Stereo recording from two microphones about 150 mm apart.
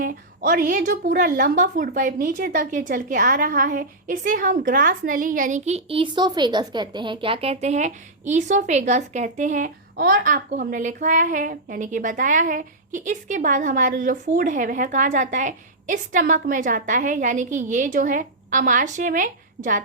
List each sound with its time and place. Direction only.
0.0 s a woman's voice: 70° right (ahead or behind)